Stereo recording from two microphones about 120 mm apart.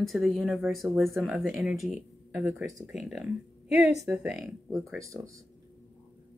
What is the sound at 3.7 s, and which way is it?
Speech, 65° left (ahead or behind).